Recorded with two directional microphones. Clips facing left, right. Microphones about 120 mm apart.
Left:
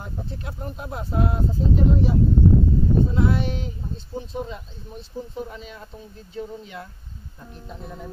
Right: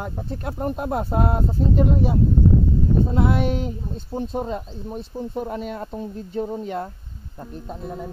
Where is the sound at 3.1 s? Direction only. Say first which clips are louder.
Right 3 dB; 50° right (ahead or behind).